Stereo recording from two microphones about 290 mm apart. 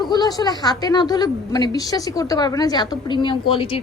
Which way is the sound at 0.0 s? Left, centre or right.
Centre.